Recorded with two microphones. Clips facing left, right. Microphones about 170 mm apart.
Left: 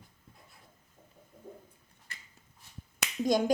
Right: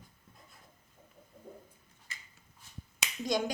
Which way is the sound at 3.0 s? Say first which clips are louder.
Left 5 dB; 50° left (ahead or behind).